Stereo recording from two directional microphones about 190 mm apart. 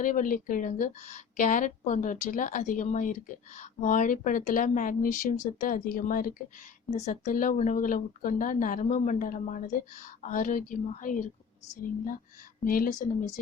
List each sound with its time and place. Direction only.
0.0 s speech: 45° left (ahead or behind)